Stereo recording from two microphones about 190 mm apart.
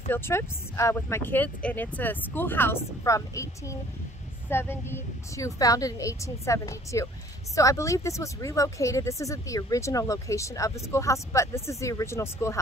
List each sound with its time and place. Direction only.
0.1 s speech: 15° left (ahead or behind)